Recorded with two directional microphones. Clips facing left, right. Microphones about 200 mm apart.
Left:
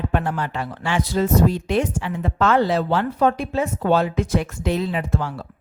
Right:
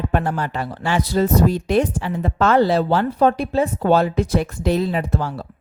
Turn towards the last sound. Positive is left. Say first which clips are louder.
# right 3 dB
turn(degrees=-35)  # may be behind; listen again after turning